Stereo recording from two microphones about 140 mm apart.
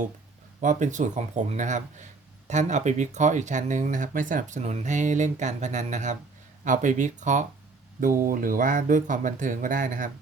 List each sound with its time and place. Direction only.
0.6 s speech: 60° right (ahead or behind)
8.0 s speech: 85° right